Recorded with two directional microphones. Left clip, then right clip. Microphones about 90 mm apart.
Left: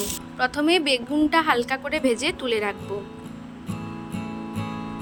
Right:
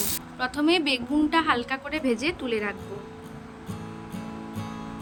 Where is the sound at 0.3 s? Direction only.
45° left (ahead or behind).